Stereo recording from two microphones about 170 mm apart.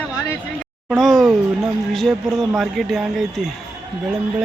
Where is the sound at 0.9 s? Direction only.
Centre (ahead or behind).